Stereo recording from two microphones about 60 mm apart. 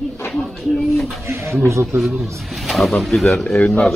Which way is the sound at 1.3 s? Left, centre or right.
Right.